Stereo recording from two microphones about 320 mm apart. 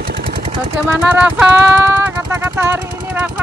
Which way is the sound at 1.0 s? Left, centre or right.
Centre.